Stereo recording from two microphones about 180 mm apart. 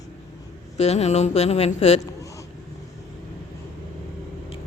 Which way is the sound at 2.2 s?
20° left (ahead or behind).